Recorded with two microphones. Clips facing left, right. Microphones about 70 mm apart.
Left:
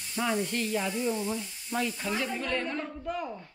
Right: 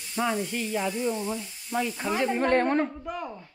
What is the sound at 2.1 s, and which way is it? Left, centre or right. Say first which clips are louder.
Speech: right 12 dB; right.